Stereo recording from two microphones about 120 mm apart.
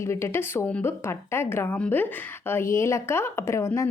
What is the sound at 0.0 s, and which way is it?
Speech, 25° left (ahead or behind).